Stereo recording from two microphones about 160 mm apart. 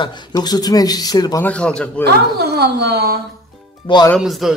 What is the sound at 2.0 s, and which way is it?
Speech, 90° right.